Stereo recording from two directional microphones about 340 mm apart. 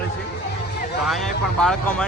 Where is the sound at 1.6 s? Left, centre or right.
Centre.